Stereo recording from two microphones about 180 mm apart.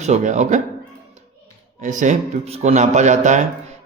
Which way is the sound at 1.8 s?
45° right (ahead or behind).